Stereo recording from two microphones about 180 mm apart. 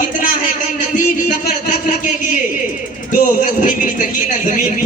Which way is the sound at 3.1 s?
45° left (ahead or behind).